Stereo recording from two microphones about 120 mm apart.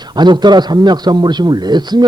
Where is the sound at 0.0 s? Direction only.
35° right (ahead or behind).